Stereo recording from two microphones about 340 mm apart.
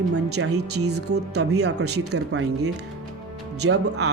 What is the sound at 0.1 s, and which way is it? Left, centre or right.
Speech, right.